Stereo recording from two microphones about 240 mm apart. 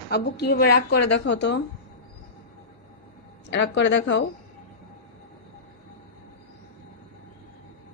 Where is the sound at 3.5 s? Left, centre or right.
Left.